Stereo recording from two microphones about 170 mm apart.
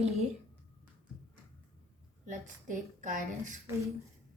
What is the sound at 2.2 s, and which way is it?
A woman's voice, 45° right (ahead or behind).